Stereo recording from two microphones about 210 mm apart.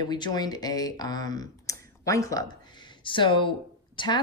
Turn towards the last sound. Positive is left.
turn(degrees=20)  # may be behind; listen again after turning